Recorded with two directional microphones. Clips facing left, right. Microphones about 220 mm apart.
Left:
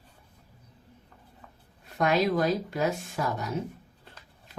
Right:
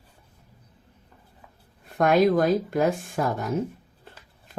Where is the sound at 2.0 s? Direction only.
50° right (ahead or behind).